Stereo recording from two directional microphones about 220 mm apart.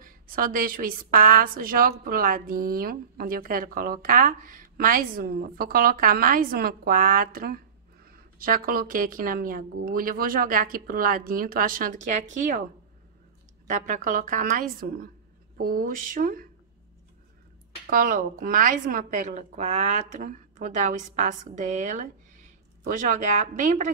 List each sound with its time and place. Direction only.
0.0 s a woman's voice: 40° right (ahead or behind)
13.7 s a woman's voice: 35° right (ahead or behind)
17.8 s a woman's voice: 40° right (ahead or behind)